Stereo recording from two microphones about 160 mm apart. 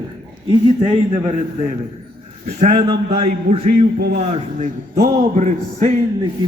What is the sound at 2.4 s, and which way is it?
Speech, 50° right (ahead or behind).